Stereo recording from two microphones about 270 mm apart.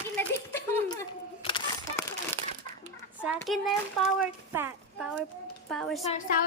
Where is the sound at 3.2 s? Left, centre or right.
Centre.